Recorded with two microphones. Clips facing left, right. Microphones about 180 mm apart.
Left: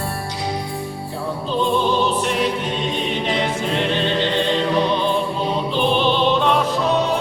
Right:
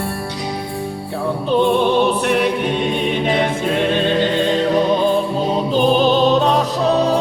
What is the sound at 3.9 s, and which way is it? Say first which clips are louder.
Music: right 3 dB; 50° right (ahead or behind).